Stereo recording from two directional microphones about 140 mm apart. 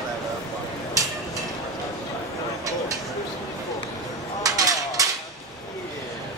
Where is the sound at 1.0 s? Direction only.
25° right (ahead or behind).